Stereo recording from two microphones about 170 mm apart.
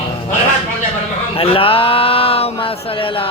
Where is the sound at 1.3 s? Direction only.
35° left (ahead or behind).